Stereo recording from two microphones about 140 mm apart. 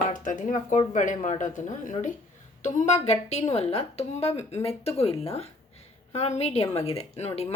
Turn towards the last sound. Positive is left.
turn(degrees=50)  # may be behind; listen again after turning